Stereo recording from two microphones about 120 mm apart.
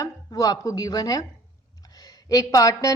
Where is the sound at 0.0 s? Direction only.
30° left (ahead or behind).